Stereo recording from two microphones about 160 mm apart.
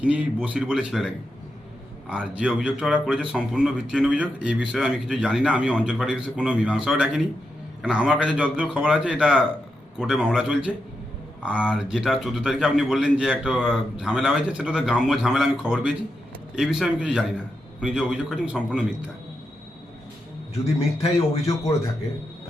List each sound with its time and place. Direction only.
0.0 s a man's voice: 10° right (ahead or behind)